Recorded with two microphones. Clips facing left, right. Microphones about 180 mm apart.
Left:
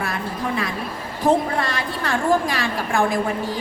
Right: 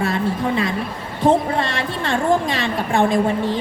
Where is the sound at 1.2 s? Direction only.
25° right (ahead or behind).